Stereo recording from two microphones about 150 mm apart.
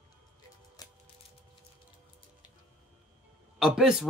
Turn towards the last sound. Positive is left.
turn(degrees=-5)  # may be behind; listen again after turning